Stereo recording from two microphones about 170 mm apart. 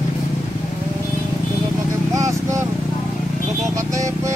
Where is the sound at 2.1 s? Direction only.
15° right (ahead or behind).